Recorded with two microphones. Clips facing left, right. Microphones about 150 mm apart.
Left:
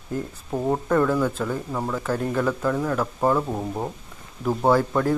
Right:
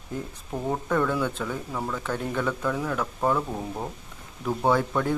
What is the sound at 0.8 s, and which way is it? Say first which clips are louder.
Speech: left 4 dB; 5° left (ahead or behind).